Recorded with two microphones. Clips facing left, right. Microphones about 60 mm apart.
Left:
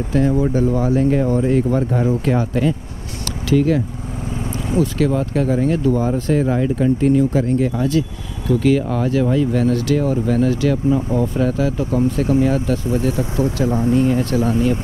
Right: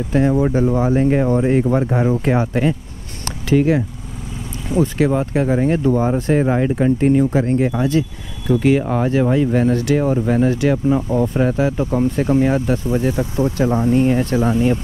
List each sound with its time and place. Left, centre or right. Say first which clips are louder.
0.3 s speech: right 1 dB; right